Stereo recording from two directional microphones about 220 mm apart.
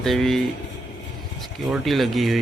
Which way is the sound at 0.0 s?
Centre (ahead or behind).